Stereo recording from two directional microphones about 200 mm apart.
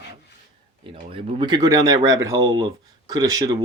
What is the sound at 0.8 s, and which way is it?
Speech, 25° right (ahead or behind).